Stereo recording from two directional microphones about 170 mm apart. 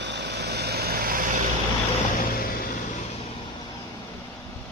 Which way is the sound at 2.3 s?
60° left (ahead or behind).